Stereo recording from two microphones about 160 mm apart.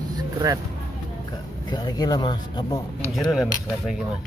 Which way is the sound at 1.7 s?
25° left (ahead or behind).